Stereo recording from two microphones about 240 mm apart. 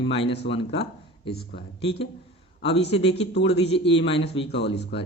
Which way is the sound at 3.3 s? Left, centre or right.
Left.